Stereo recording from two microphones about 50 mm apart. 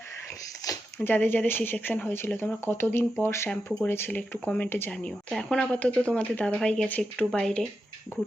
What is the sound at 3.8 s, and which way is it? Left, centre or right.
Speech, left.